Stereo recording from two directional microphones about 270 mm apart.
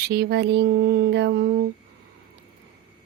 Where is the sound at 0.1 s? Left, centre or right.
Right.